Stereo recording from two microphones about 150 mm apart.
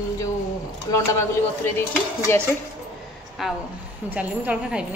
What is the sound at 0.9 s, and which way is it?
Speech, 25° left (ahead or behind).